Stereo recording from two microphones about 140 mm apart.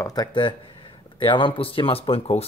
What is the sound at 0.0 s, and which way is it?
Speech, 30° left (ahead or behind).